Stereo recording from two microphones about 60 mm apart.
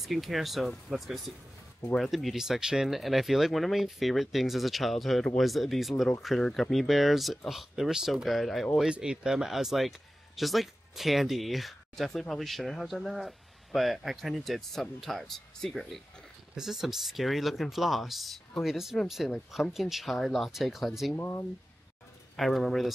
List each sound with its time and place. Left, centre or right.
0.0 s speech: centre
8.8 s speech: centre
16.5 s speech: centre
21.1 s speech: left
22.4 s speech: centre